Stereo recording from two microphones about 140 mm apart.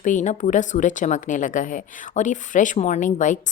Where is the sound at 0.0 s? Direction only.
65° left (ahead or behind).